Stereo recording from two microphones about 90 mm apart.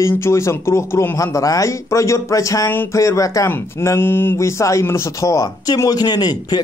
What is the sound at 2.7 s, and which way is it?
Speech, 20° left (ahead or behind).